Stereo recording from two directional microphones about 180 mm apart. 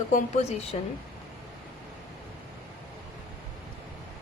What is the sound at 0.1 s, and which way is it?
Speech, 40° left (ahead or behind).